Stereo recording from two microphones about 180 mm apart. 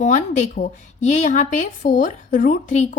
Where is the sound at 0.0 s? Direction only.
40° left (ahead or behind).